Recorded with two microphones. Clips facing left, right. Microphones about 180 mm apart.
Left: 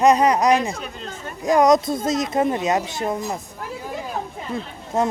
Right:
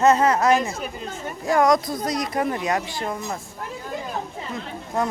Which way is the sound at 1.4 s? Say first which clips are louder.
Left 3 dB; 20° left (ahead or behind).